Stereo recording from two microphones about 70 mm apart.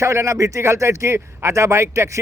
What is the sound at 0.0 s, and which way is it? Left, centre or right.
A man's voice, right.